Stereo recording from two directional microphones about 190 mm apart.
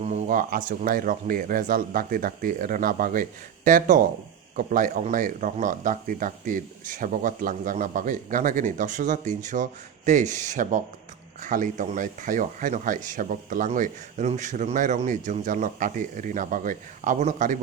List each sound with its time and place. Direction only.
0.0 s speech: 40° right (ahead or behind)